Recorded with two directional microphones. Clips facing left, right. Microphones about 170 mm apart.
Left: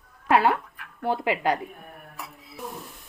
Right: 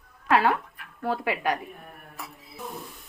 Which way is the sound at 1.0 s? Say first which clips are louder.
Left 2 dB; 20° left (ahead or behind).